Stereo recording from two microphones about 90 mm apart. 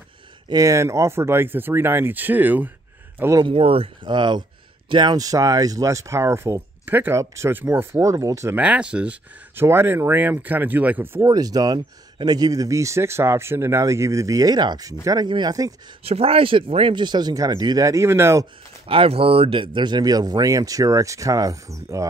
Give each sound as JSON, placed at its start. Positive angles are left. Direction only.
{"t": 0.5, "sound": "speech", "side_deg": -40}
{"t": 3.4, "sound": "speech", "side_deg": -90}
{"t": 8.5, "sound": "speech", "side_deg": -10}
{"t": 9.6, "sound": "speech", "side_deg": -25}
{"t": 11.1, "sound": "speech", "side_deg": -40}
{"t": 15.2, "sound": "speech", "side_deg": -60}
{"t": 16.0, "sound": "speech", "side_deg": -90}
{"t": 18.9, "sound": "speech", "side_deg": -90}